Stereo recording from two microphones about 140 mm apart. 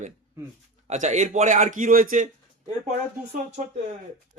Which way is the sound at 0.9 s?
60° right (ahead or behind).